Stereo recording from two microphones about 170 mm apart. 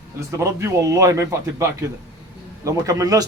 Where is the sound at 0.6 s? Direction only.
15° right (ahead or behind).